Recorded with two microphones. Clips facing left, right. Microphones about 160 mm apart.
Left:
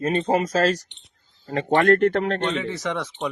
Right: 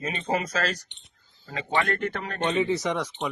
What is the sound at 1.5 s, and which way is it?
Speech, 55° left (ahead or behind).